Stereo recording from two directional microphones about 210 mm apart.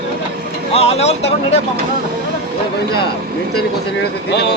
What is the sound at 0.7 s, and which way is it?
Speech, 30° left (ahead or behind).